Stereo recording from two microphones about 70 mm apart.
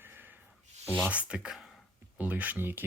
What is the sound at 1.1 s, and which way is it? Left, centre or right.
Speech, centre.